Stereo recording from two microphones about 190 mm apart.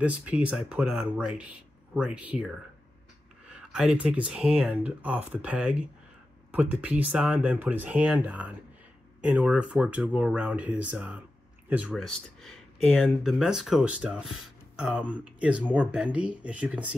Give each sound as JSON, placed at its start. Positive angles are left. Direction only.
{"t": 0.0, "sound": "speech", "side_deg": -5}
{"t": 3.4, "sound": "a sound", "side_deg": -5}
{"t": 4.3, "sound": "speech", "side_deg": -5}